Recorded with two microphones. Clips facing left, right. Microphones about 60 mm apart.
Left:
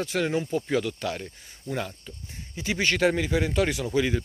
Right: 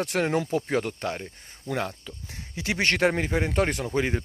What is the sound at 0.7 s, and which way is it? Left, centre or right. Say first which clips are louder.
Speech: even; right.